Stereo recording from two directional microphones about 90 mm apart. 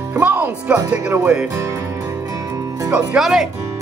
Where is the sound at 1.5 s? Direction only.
30° right (ahead or behind).